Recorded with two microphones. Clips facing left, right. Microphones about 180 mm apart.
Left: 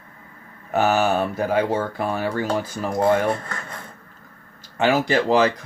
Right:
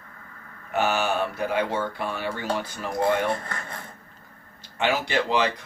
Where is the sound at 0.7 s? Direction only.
40° left (ahead or behind).